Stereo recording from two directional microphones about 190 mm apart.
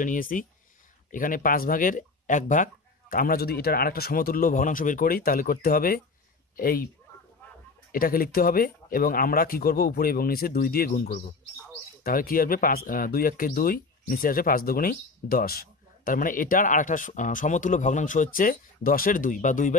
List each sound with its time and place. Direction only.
0.0 s speech: 45° left (ahead or behind)
7.9 s speech: 50° left (ahead or behind)